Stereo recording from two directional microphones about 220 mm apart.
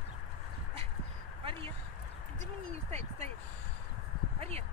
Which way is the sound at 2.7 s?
30° right (ahead or behind).